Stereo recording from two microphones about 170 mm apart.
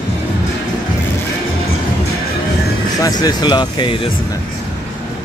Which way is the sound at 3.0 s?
25° left (ahead or behind).